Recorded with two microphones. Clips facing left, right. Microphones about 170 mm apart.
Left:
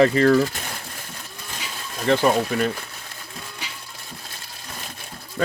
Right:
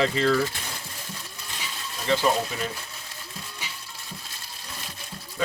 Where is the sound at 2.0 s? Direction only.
55° left (ahead or behind).